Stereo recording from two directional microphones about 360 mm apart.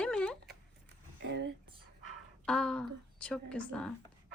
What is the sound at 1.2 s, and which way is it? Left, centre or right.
Speech, right.